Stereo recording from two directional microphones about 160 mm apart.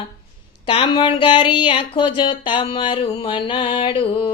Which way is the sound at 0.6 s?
30° left (ahead or behind).